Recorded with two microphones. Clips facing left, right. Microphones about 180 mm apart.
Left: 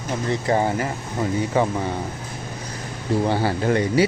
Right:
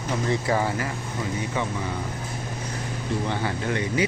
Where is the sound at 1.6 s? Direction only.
35° left (ahead or behind).